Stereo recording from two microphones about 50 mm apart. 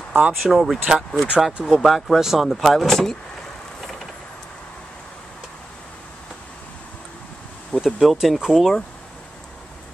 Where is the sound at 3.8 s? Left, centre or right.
Centre.